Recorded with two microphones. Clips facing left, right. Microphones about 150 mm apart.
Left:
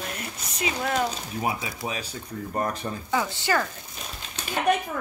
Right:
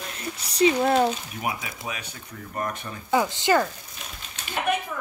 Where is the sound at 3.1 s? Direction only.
20° right (ahead or behind).